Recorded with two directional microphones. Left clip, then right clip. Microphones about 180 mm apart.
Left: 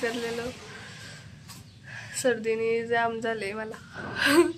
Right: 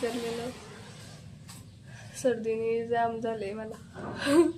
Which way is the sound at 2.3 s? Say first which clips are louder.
Left 3 dB; centre (ahead or behind).